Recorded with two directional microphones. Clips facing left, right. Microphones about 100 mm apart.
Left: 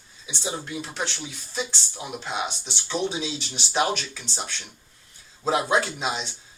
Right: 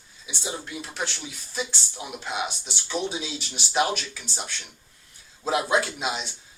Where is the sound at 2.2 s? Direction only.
5° right (ahead or behind).